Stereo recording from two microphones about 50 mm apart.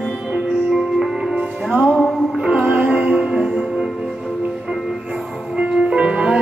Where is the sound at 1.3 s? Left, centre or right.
Right.